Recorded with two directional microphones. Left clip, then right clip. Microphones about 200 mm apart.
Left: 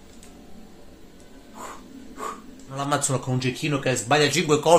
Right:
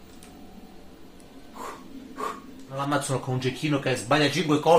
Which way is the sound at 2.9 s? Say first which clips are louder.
Left 3 dB; 55° left (ahead or behind).